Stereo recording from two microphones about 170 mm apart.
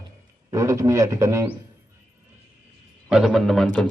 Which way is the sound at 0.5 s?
20° right (ahead or behind).